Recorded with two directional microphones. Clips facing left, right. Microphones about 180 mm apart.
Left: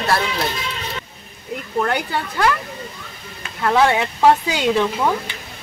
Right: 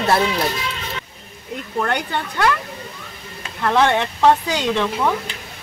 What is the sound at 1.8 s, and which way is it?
Speech, 5° left (ahead or behind).